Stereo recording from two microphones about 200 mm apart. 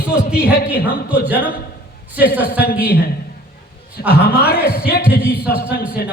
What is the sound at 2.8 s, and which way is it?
Speech, 50° left (ahead or behind).